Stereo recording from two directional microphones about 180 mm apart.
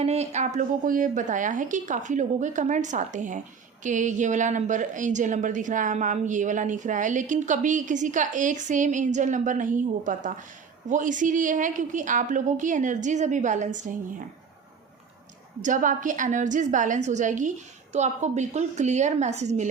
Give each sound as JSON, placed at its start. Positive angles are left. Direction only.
{"t": 0.0, "sound": "a woman's voice", "side_deg": -35}
{"t": 15.6, "sound": "a woman's voice", "side_deg": -45}